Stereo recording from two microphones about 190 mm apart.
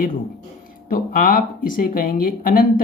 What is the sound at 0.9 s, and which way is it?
Speech, 50° left (ahead or behind).